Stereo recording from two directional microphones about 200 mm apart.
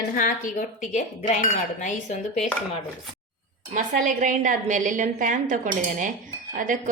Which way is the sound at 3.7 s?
40° right (ahead or behind).